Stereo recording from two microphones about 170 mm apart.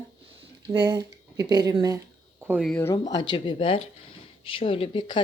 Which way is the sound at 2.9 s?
25° left (ahead or behind).